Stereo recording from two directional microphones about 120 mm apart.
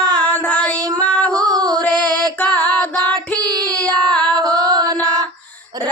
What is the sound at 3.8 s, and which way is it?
Child singing, 5° left (ahead or behind).